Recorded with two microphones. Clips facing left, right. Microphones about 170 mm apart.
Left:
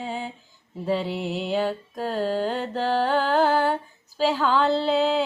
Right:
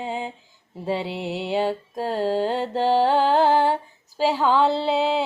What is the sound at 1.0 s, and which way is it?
Music, 80° right.